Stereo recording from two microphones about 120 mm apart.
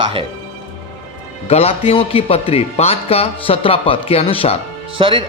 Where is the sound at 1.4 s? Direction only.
55° left (ahead or behind).